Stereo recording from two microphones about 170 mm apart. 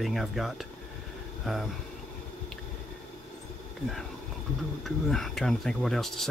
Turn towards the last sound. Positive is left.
turn(degrees=0)  # may be behind; listen again after turning